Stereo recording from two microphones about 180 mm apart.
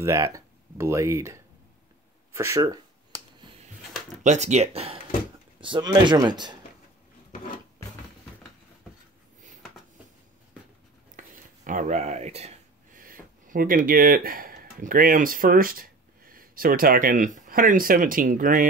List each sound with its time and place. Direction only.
0.0 s speech: 15° right (ahead or behind)
4.2 s speech: 40° right (ahead or behind); by 6.6 s 25° right (ahead or behind)
11.1 s a sound: 50° right (ahead or behind)
13.0 s speech: 50° right (ahead or behind)